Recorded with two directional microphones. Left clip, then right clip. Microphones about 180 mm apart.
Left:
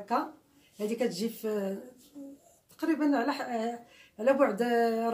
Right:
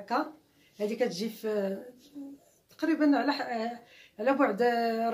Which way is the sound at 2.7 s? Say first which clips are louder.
Right 2 dB; 15° right (ahead or behind).